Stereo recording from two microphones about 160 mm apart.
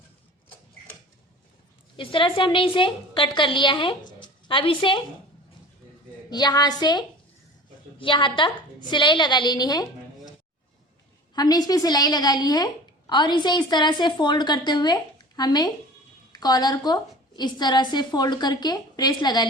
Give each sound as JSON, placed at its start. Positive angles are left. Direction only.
{"t": 2.0, "sound": "a woman's voice", "side_deg": 30}
{"t": 6.3, "sound": "a woman's voice", "side_deg": 25}
{"t": 11.3, "sound": "a woman's voice", "side_deg": 25}